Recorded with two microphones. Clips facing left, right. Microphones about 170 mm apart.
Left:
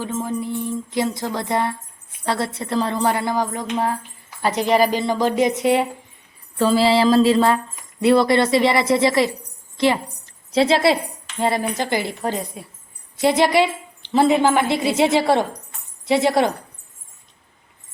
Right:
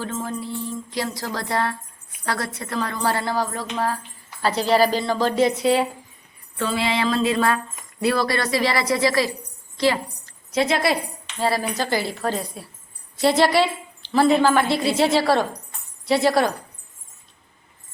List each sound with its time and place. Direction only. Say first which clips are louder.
0.0 s speech: left 4 dB; 15° left (ahead or behind)
6.6 s mantra: left 7 dB; 35° left (ahead or behind)
8.0 s a woman's voice: left 6 dB; 25° left (ahead or behind)